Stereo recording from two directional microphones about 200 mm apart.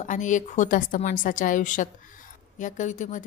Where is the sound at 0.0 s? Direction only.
40° left (ahead or behind).